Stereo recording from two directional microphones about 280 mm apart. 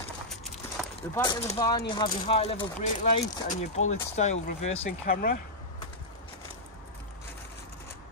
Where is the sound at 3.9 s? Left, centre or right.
Left.